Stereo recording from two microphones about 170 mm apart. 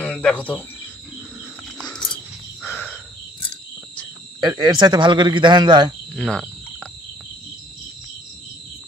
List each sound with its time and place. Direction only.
0.0 s cricket: 5° left (ahead or behind)
2.6 s cricket: 10° left (ahead or behind)
4.4 s speech: 25° right (ahead or behind)
6.1 s cricket: 5° left (ahead or behind)